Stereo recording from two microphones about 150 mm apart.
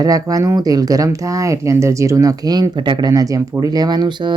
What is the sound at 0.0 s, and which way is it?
Speech, 25° right (ahead or behind).